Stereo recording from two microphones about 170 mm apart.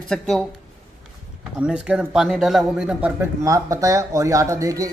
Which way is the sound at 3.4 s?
20° right (ahead or behind).